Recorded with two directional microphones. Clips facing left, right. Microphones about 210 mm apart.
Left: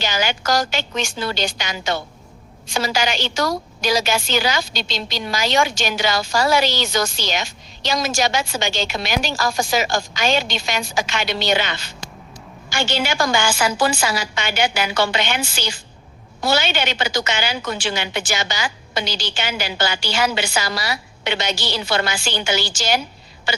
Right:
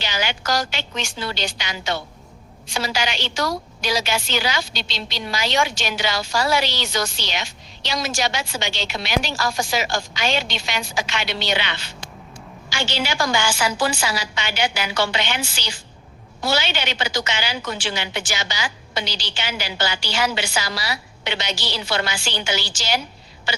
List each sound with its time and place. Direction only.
0.0 s a woman's voice: 45° left (ahead or behind)